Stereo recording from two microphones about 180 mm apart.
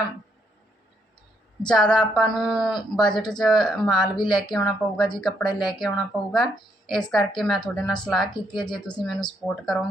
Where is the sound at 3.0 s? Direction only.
25° left (ahead or behind).